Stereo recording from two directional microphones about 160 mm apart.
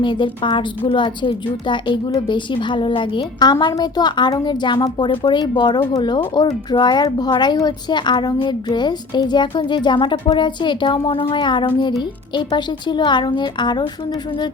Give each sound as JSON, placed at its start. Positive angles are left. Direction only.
{"t": 0.0, "sound": "a woman's voice", "side_deg": 30}